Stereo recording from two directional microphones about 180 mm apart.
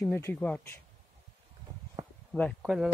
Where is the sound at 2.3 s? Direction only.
Centre (ahead or behind).